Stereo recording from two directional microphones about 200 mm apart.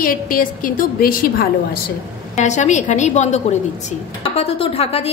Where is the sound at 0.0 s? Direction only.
45° left (ahead or behind).